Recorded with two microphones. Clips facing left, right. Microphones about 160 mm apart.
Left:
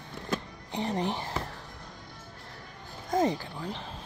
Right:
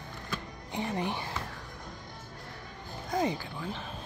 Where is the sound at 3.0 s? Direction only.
45° left (ahead or behind).